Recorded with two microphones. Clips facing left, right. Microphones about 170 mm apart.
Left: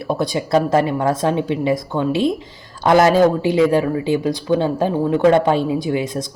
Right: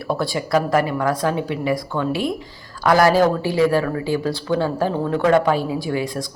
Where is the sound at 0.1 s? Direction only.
20° left (ahead or behind).